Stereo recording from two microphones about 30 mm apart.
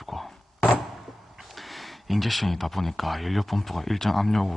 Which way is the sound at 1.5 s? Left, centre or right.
Centre.